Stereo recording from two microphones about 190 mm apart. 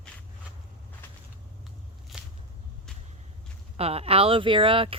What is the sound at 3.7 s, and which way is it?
Speech, 30° right (ahead or behind).